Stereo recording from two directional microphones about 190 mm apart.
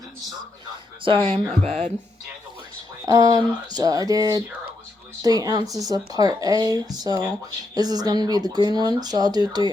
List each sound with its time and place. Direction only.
1.0 s speech: 30° right (ahead or behind)
3.1 s speech: 20° right (ahead or behind)